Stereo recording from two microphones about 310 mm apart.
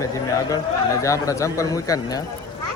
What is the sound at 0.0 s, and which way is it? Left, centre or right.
Speech, centre.